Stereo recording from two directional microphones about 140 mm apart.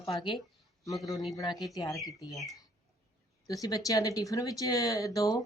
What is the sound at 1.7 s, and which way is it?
Speech, 25° left (ahead or behind).